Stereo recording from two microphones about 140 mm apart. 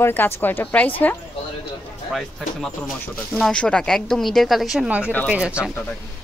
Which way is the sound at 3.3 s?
5° left (ahead or behind).